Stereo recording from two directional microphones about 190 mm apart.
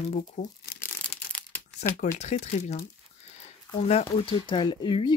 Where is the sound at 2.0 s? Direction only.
40° left (ahead or behind).